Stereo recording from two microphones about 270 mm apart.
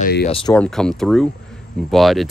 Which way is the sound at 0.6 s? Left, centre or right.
Centre.